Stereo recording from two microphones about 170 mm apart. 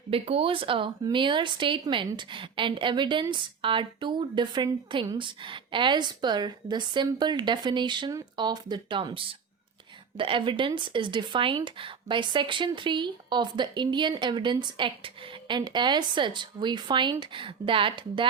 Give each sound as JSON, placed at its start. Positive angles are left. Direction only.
{"t": 0.1, "sound": "speech", "side_deg": -35}